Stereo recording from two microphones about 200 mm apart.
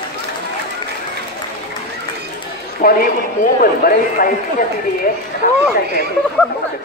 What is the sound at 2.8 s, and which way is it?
Speech, 45° left (ahead or behind).